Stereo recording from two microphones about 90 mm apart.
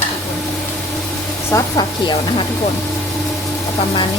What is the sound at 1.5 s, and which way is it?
Speech, 35° left (ahead or behind).